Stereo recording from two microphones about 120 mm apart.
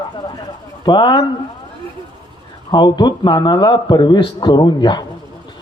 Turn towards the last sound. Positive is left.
turn(degrees=35)  # may be behind; listen again after turning